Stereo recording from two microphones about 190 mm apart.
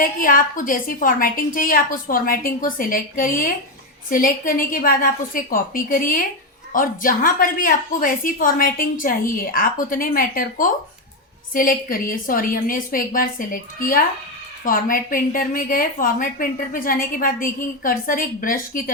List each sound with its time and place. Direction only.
0.0 s a woman's voice: 50° left (ahead or behind)